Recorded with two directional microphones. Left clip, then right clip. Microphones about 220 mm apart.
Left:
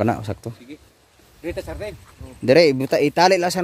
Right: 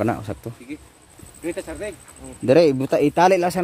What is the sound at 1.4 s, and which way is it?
Speech, 50° left (ahead or behind).